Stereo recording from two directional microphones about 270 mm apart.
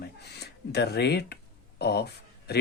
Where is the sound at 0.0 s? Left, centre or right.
Left.